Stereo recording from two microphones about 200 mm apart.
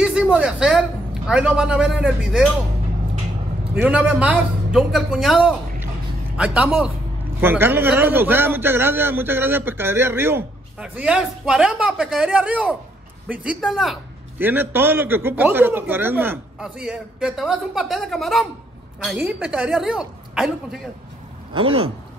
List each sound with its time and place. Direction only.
0.0 s speech: 5° right (ahead or behind)
3.7 s a man's voice: 5° right (ahead or behind)
21.5 s speech: 30° right (ahead or behind)